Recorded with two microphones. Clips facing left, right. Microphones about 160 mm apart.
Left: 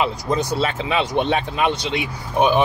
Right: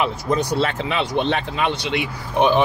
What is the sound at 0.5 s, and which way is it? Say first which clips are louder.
Speech: even; 10° left (ahead or behind).